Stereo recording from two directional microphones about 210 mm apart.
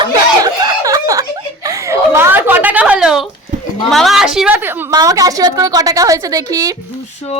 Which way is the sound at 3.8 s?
Centre (ahead or behind).